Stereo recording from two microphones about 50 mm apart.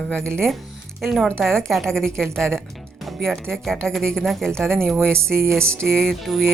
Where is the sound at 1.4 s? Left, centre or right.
Centre.